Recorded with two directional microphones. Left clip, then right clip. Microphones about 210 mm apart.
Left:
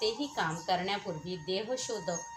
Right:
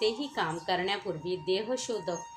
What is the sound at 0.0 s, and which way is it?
A woman's voice, 35° right (ahead or behind).